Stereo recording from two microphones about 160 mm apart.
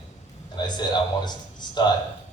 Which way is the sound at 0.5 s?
25° left (ahead or behind).